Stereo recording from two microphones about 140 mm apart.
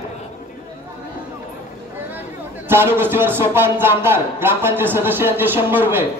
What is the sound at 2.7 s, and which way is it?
Speech, 15° right (ahead or behind).